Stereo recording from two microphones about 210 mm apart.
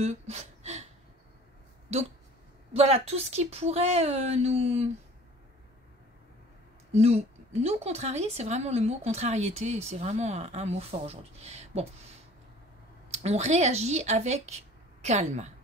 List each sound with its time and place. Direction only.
0.0 s a sound: 30° right (ahead or behind)
2.7 s speech: 30° right (ahead or behind)
6.9 s speech: 30° right (ahead or behind)
13.1 s speech: 30° right (ahead or behind)